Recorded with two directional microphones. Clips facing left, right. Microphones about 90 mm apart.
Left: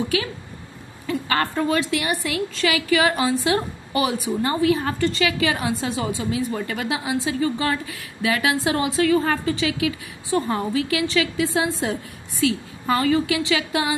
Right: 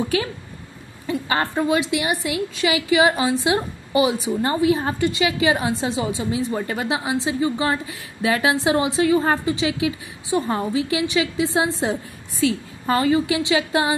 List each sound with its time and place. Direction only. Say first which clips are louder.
0.1 s a woman's voice: right 2 dB; 35° right (ahead or behind)